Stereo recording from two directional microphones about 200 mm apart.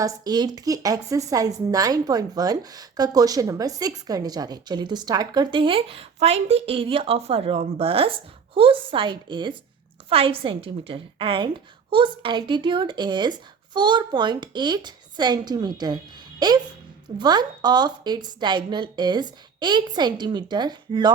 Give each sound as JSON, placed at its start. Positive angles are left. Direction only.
{"t": 0.0, "sound": "a woman's voice", "side_deg": -20}